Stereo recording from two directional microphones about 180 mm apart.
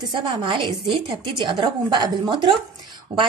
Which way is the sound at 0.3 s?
25° right (ahead or behind).